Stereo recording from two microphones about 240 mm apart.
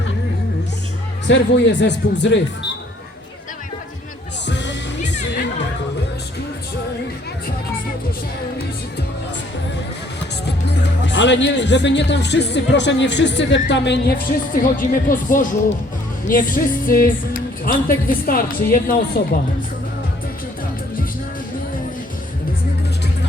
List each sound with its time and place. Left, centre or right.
1.3 s speech: left
4.4 s music: left
10.4 s speech: left